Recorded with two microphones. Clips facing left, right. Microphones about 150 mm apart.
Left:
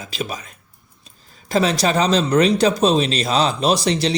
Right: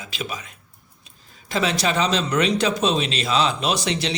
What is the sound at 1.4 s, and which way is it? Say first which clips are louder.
A man's voice: left 4 dB; 40° left (ahead or behind).